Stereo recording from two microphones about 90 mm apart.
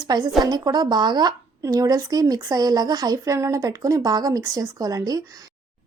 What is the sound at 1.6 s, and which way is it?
Speech, 40° right (ahead or behind).